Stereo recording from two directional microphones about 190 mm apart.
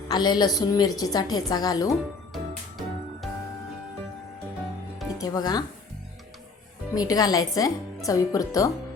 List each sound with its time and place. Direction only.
0.1 s a woman's voice: 20° left (ahead or behind)
2.3 s music: centre (ahead or behind)
5.2 s a woman's voice: 20° left (ahead or behind)
6.9 s a woman's voice: 20° left (ahead or behind)